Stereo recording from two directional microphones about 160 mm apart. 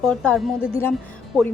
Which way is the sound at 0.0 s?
5° left (ahead or behind).